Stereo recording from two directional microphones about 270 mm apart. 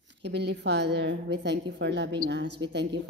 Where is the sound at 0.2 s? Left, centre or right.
Right.